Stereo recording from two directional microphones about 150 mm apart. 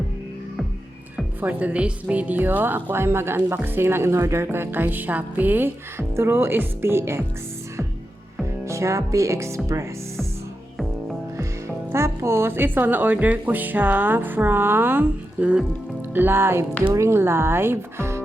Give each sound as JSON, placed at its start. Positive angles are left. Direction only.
{"t": 1.1, "sound": "speech", "side_deg": -10}
{"t": 8.6, "sound": "speech", "side_deg": -20}
{"t": 11.9, "sound": "speech", "side_deg": -20}